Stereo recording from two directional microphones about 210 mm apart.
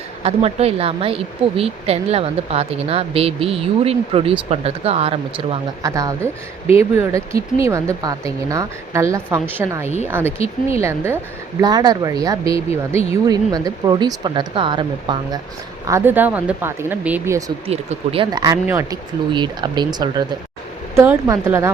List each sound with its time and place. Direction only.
0.2 s speech: 30° right (ahead or behind)
5.8 s a woman's voice: 15° right (ahead or behind)
7.6 s a woman's voice: 15° right (ahead or behind)
15.9 s a woman's voice: 10° right (ahead or behind)
17.7 s a woman's voice: 30° right (ahead or behind); by 21.7 s 15° right (ahead or behind)